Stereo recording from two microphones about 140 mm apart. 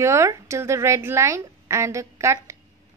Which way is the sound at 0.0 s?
20° right (ahead or behind).